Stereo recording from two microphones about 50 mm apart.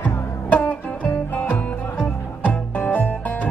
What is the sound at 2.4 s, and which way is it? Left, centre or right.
Music, left.